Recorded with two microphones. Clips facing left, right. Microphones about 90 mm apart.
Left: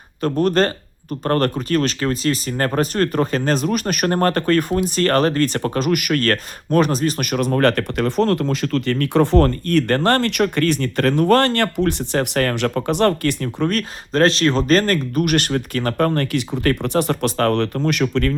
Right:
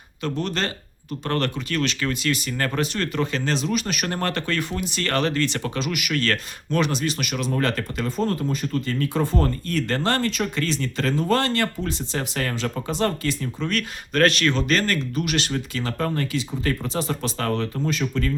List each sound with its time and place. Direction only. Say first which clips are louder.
0.2 s speech: left 9 dB; 45° left (ahead or behind)
13.7 s speech: even; 30° left (ahead or behind); by 18.3 s 65° left (ahead or behind)